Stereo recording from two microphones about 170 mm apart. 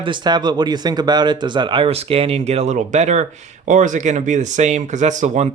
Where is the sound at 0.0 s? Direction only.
25° right (ahead or behind).